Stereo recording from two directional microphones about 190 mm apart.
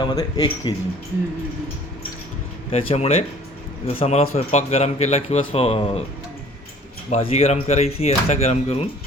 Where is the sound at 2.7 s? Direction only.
30° left (ahead or behind).